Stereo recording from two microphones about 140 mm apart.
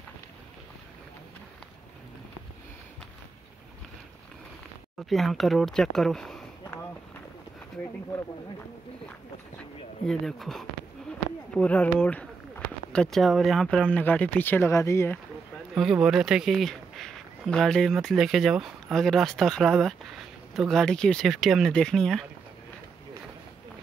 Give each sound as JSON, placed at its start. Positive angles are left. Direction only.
{"t": 4.9, "sound": "speech", "side_deg": 0}
{"t": 10.0, "sound": "speech", "side_deg": 0}
{"t": 15.7, "sound": "speech", "side_deg": 0}